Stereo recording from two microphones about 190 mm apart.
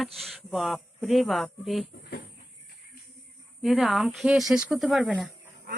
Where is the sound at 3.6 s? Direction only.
Centre (ahead or behind).